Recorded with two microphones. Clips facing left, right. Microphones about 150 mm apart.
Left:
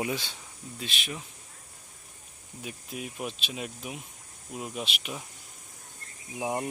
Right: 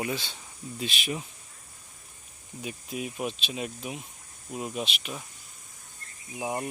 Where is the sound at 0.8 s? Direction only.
10° right (ahead or behind).